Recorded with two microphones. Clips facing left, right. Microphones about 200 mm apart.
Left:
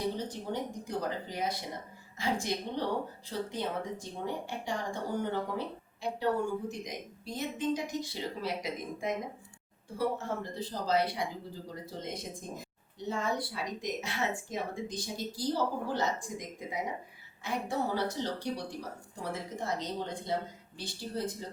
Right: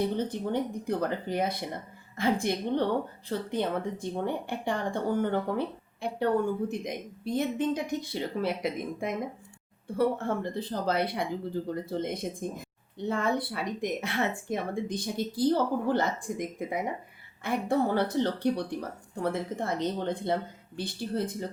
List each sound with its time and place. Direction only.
0.2 s speech: 55° right (ahead or behind)